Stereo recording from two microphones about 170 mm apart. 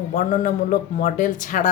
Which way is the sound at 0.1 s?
50° left (ahead or behind).